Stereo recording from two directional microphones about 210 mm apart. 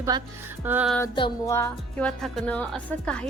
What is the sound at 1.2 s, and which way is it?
Speech, 20° left (ahead or behind).